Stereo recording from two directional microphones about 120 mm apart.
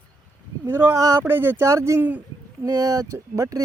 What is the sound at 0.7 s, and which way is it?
Speech, 20° right (ahead or behind).